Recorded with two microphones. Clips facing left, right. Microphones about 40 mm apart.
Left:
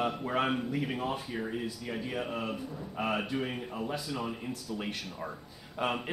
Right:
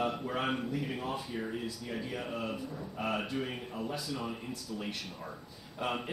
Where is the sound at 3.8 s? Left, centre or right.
Left.